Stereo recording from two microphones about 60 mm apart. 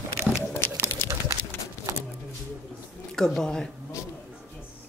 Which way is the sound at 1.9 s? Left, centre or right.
Right.